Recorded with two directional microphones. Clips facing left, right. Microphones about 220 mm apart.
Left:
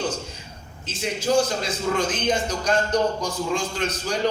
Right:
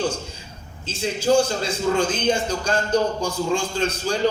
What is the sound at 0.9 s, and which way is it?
A man's voice, 30° right (ahead or behind).